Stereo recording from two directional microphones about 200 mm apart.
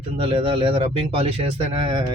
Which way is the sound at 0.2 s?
25° right (ahead or behind).